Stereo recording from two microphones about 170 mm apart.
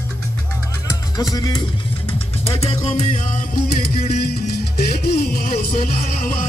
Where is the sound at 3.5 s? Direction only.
65° left (ahead or behind).